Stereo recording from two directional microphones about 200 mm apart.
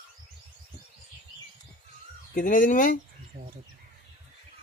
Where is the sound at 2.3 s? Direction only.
45° left (ahead or behind).